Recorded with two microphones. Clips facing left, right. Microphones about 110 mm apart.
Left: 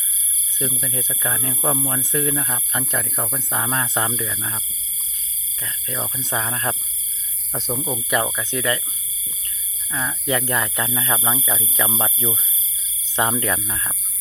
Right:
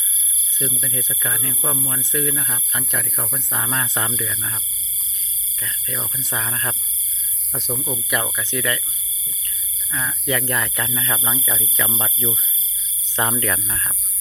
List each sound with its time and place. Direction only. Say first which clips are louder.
0.6 s speech: left 1 dB; 25° left (ahead or behind)
5.6 s speech: left 2 dB; 25° left (ahead or behind)
10.0 s speech: left 1 dB; 25° left (ahead or behind)
13.4 s speech: left 1 dB; 20° left (ahead or behind)